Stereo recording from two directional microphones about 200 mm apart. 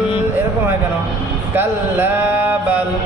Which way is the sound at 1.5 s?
10° right (ahead or behind).